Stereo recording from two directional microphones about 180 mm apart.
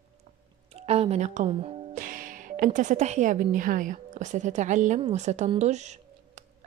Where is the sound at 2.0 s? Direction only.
50° right (ahead or behind).